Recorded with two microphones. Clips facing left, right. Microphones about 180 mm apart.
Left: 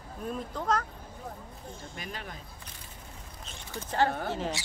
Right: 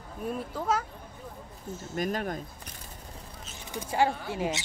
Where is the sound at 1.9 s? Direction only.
45° right (ahead or behind).